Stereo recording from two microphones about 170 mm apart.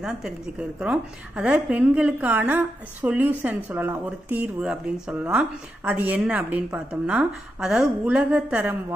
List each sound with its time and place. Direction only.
0.0 s a woman's voice: 5° right (ahead or behind)